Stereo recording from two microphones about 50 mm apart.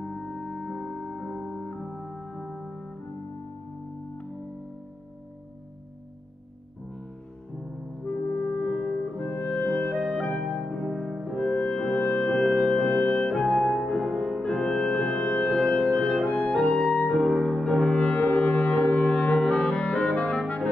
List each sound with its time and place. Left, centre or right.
0.0 s music: centre
1.1 s keyboard: centre
1.5 s organ: left
8.0 s music: left
9.2 s clarinet: left
10.0 s music: centre
10.8 s music: centre; by 13.4 s left
13.4 s music: centre
17.8 s brass instrument: left